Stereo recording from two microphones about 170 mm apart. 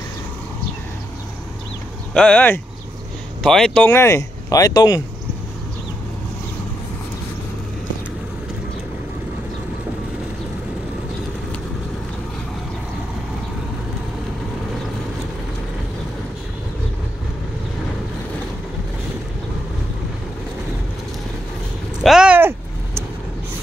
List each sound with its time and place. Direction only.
2.1 s speech: 5° left (ahead or behind)
22.0 s vehicle: 5° right (ahead or behind)